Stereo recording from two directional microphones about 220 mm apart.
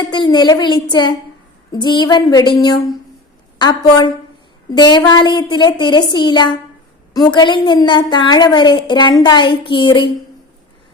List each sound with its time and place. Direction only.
0.0 s a woman's voice: 20° left (ahead or behind)